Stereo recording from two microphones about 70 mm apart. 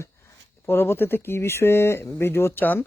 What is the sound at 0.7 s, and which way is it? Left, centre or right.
Speech, left.